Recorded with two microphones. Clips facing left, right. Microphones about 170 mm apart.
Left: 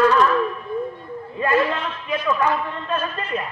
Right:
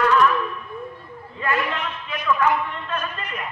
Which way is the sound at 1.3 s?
20° left (ahead or behind).